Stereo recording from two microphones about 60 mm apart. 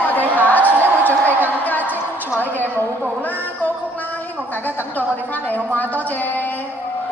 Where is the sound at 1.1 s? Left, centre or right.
Right.